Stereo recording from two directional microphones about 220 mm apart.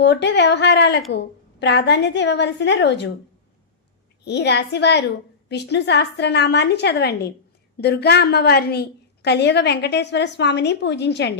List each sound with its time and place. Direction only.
0.0 s a woman's voice: 50° left (ahead or behind)
4.2 s a woman's voice: 50° left (ahead or behind)